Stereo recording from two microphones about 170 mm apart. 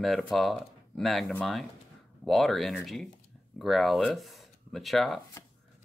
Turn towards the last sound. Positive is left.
turn(degrees=0)  # may be behind; listen again after turning